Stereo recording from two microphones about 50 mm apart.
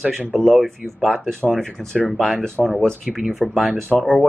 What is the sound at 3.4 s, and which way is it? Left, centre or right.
Speech, centre.